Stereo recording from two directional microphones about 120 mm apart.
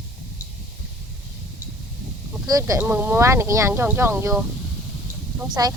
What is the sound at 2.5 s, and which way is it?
Speech, 30° right (ahead or behind).